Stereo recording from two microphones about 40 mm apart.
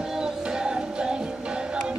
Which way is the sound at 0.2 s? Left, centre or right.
Centre.